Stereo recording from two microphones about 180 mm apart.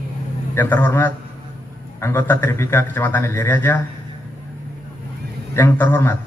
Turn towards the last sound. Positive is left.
turn(degrees=10)  # may be behind; listen again after turning